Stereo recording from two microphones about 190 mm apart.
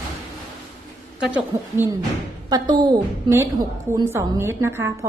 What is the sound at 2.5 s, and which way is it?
A woman's voice, 20° right (ahead or behind).